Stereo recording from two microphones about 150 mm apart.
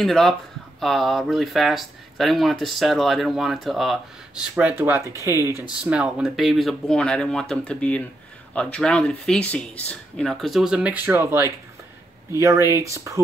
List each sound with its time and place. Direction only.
0.0 s speech: 5° left (ahead or behind); by 5.9 s 15° right (ahead or behind)
5.9 s speech: 5° right (ahead or behind); by 13.2 s 20° right (ahead or behind)